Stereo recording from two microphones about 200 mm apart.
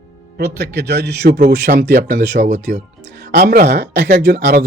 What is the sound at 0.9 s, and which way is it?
Speech, 55° right (ahead or behind).